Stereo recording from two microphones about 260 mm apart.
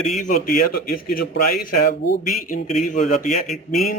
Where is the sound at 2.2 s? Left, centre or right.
Left.